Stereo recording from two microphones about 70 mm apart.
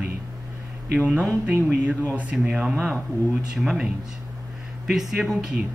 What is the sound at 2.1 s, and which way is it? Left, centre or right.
Speech, right.